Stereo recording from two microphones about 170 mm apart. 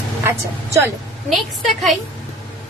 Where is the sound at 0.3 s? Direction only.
15° right (ahead or behind).